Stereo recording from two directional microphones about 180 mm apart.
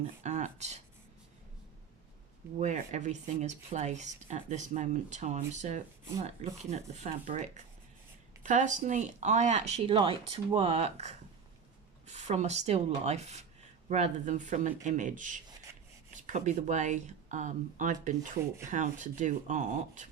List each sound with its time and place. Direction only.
0.2 s a sound: 40° right (ahead or behind)
2.6 s speech: 40° right (ahead or behind)
12.1 s speech: 40° right (ahead or behind)